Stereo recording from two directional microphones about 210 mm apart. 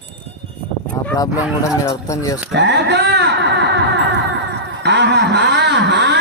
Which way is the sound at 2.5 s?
60° right (ahead or behind).